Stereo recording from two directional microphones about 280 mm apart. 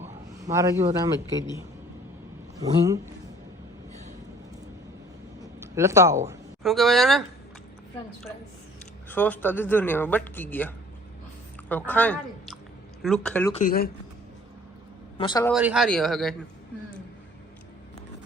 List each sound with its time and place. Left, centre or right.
0.5 s a man's voice: centre
2.6 s a man's voice: centre
5.4 s a sound: centre
6.6 s speech: centre
9.0 s speech: centre
13.5 s speech: left
15.2 s speech: centre
15.5 s speech: centre